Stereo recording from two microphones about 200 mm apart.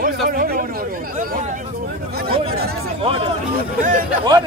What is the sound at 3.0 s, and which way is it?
Speech, 30° right (ahead or behind).